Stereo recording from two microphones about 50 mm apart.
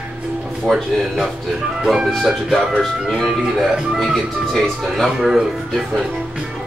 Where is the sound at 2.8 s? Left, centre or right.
Centre.